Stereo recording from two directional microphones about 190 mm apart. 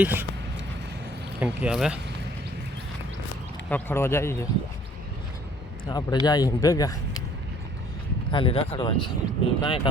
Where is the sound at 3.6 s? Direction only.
10° left (ahead or behind).